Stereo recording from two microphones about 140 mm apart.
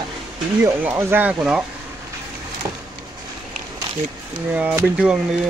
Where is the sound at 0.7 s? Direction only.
15° right (ahead or behind).